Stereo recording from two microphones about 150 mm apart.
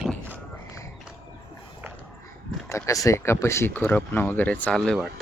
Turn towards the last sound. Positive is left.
turn(degrees=5)  # may be behind; listen again after turning